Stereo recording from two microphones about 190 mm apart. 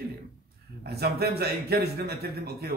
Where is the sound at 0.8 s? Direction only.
55° right (ahead or behind).